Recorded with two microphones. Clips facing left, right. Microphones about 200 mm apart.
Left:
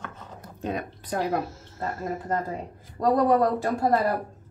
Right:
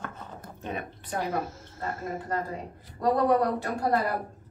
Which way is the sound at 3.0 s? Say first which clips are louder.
Left 2 dB; 45° left (ahead or behind).